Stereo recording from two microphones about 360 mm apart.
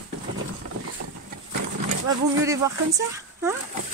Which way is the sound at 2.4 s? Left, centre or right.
Centre.